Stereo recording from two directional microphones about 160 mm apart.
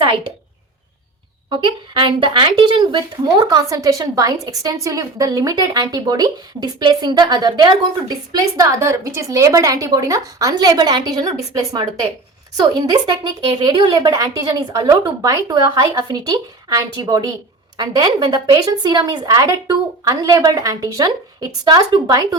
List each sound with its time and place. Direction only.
1.5 s speech: 30° right (ahead or behind)